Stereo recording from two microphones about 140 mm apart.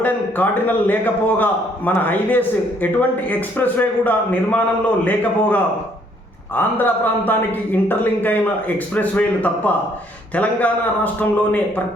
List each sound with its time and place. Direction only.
0.0 s a man's voice: 10° left (ahead or behind)
6.6 s a man's voice: 15° left (ahead or behind)